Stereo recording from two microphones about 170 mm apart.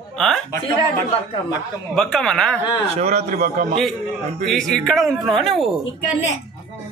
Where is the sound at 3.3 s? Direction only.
50° right (ahead or behind).